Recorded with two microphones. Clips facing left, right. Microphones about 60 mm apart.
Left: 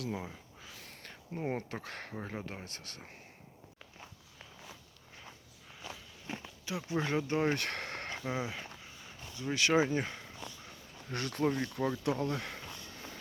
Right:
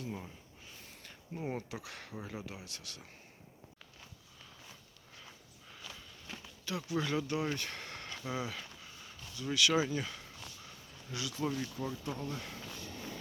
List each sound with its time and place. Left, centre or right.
0.0 s a sound: left
0.9 s speech: left
5.8 s walk: centre
6.7 s speech: left
7.3 s speech: left
7.6 s a sound: left
8.2 s speech: left
10.2 s a sound: left
11.1 s speech: left